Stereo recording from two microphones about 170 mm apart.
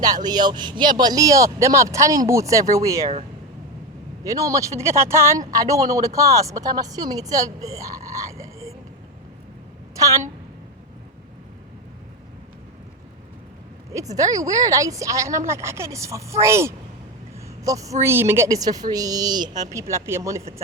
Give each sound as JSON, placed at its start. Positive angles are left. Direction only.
{"t": 0.0, "sound": "speech", "side_deg": -25}
{"t": 4.2, "sound": "a woman's voice", "side_deg": -20}
{"t": 9.9, "sound": "a woman's voice", "side_deg": -20}
{"t": 13.9, "sound": "a woman's voice", "side_deg": -20}